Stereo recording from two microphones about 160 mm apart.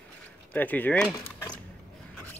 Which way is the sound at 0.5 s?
10° left (ahead or behind).